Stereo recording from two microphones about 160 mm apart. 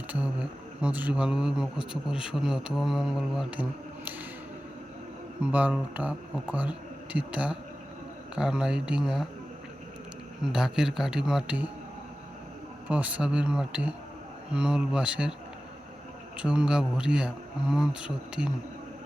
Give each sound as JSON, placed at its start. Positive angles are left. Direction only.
{"t": 0.1, "sound": "speech", "side_deg": -5}
{"t": 5.4, "sound": "speech", "side_deg": -10}
{"t": 10.4, "sound": "speech", "side_deg": -5}
{"t": 12.9, "sound": "speech", "side_deg": -10}
{"t": 16.4, "sound": "speech", "side_deg": -5}